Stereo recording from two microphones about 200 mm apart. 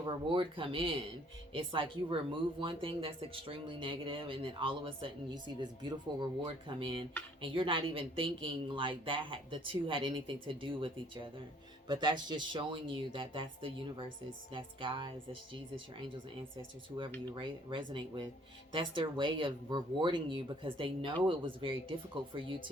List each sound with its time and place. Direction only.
0.0 s speech: 25° right (ahead or behind)
17.2 s speech: 25° right (ahead or behind)